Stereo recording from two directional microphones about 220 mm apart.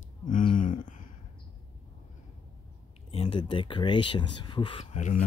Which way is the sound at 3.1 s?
25° left (ahead or behind).